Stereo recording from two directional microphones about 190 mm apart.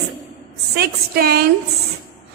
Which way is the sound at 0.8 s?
55° right (ahead or behind).